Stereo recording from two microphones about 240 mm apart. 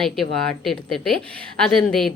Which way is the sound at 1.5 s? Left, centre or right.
Centre.